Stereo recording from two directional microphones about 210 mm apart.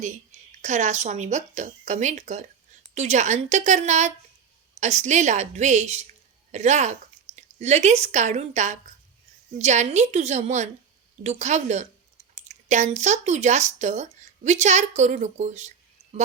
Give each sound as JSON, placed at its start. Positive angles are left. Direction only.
{"t": 0.0, "sound": "speech", "side_deg": -35}